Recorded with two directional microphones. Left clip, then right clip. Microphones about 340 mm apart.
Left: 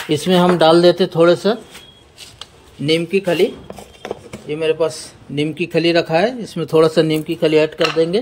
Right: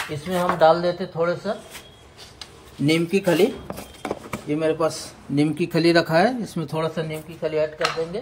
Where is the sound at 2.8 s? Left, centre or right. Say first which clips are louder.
Left 4 dB; centre.